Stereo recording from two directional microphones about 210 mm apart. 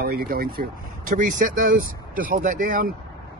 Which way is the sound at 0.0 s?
45° right (ahead or behind).